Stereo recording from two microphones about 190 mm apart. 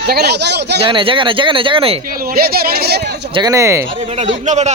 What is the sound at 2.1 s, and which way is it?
A man's voice, 50° right (ahead or behind).